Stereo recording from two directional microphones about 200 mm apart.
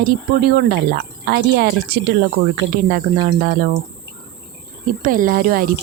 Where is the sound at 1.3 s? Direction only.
50° right (ahead or behind).